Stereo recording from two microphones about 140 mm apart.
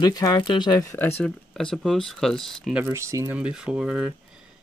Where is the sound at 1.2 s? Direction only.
5° left (ahead or behind).